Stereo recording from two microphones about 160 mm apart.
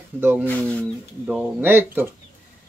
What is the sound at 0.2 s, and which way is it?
Speech, 15° right (ahead or behind).